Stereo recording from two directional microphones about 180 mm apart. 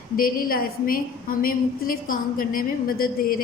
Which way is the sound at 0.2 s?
55° left (ahead or behind).